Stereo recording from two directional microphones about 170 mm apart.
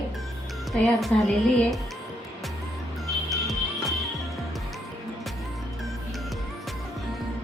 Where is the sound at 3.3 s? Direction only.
Centre (ahead or behind).